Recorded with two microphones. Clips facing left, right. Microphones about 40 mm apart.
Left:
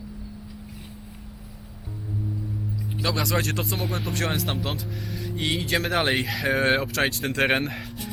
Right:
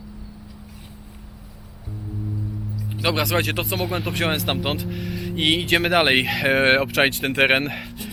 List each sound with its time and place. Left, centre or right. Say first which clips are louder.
3.0 s speech: right 5 dB; right
3.2 s speech: right 3 dB; centre
5.0 s speech: right 4 dB; centre
5.3 s speech: right 6 dB; right
6.2 s speech: right 5 dB; centre
6.5 s speech: right 4 dB; right
7.6 s speech: right 3 dB; centre